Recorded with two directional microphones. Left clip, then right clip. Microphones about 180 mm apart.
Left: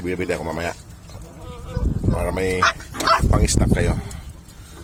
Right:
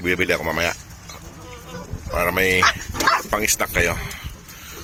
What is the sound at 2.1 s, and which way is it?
Speech, 10° left (ahead or behind).